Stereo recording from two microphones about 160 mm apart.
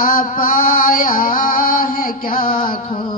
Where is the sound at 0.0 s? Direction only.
60° left (ahead or behind).